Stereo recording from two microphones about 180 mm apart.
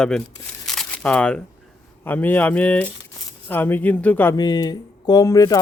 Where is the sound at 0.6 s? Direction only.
Centre (ahead or behind).